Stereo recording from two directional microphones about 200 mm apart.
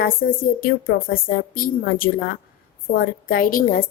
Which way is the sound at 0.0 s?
45° left (ahead or behind).